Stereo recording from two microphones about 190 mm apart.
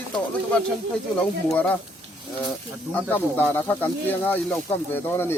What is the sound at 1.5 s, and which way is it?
Speech, 5° left (ahead or behind).